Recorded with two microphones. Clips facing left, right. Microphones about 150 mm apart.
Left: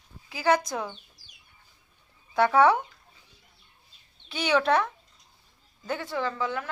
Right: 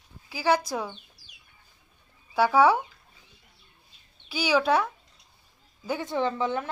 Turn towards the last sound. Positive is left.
turn(degrees=-20)  # may be behind; listen again after turning